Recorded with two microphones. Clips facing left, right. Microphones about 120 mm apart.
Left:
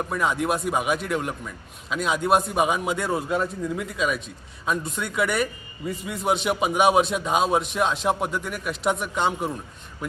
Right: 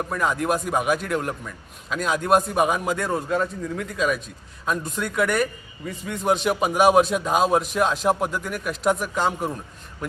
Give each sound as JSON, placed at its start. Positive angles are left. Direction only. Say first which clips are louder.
{"t": 0.1, "sound": "a man's voice", "louder": "right 1 dB", "side_deg": 0}